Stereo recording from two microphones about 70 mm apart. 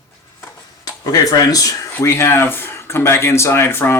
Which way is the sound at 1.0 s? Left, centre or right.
Left.